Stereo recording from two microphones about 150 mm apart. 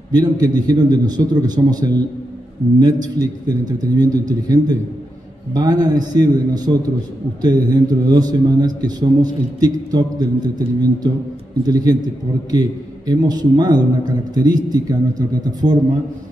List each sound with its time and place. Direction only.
0.1 s a man's voice: 25° right (ahead or behind)